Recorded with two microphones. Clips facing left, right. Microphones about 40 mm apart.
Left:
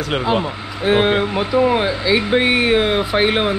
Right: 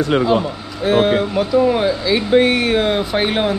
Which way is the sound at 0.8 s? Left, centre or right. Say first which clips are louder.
Right 1 dB; left.